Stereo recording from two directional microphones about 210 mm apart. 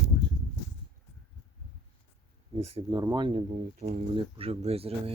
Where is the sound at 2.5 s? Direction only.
30° right (ahead or behind).